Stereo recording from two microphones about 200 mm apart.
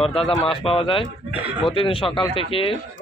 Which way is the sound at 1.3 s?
10° right (ahead or behind).